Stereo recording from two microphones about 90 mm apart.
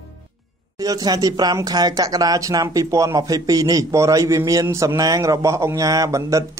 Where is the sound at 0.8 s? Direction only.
45° right (ahead or behind).